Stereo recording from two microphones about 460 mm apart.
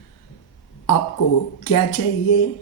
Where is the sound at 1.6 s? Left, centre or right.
Left.